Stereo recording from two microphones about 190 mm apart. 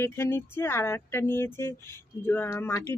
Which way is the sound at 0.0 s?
10° left (ahead or behind).